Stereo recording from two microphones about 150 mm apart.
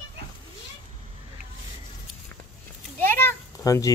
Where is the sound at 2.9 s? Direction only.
15° left (ahead or behind).